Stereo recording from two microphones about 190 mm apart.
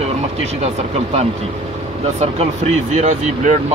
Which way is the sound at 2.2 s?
35° right (ahead or behind).